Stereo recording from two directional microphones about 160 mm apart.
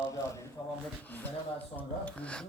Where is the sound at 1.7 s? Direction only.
10° left (ahead or behind).